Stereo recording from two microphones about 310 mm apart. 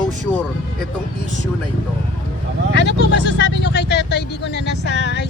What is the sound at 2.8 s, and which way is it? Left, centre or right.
Speech, left.